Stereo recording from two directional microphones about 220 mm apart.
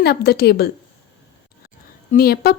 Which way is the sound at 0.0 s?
45° left (ahead or behind).